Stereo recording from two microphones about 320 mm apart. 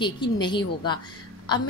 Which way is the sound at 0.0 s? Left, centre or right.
Centre.